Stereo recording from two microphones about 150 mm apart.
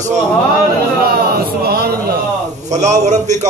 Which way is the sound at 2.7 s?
50° right (ahead or behind).